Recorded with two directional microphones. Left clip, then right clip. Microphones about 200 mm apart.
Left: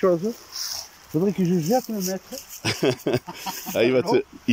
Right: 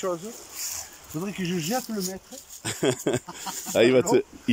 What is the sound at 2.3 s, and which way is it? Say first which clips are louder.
Speech: left 7 dB; centre (ahead or behind).